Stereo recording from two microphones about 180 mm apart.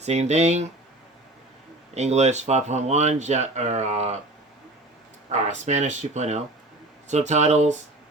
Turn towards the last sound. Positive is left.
turn(degrees=-40)  # may be behind; listen again after turning